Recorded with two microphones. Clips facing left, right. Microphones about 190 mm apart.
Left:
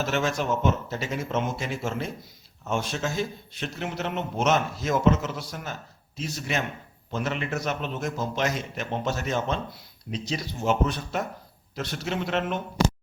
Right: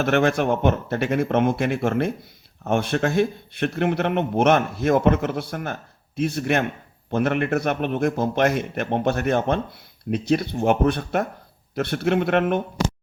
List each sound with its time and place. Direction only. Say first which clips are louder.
0.0 s speech: right 7 dB; 60° right (ahead or behind)